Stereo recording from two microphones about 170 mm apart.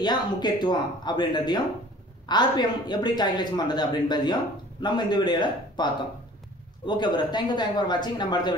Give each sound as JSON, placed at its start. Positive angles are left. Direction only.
{"t": 0.0, "sound": "a man's voice", "side_deg": 25}
{"t": 6.9, "sound": "a man's voice", "side_deg": 25}